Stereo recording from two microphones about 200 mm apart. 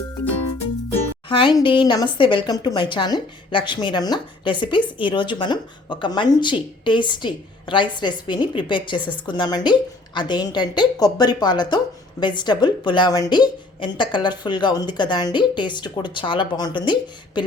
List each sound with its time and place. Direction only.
1.3 s a woman's voice: 25° left (ahead or behind)